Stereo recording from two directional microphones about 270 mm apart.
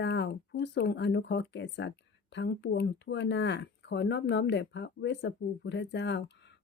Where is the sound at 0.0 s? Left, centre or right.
Left.